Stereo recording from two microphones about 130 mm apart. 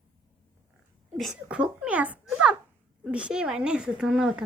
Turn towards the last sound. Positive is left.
turn(degrees=-10)  # may be behind; listen again after turning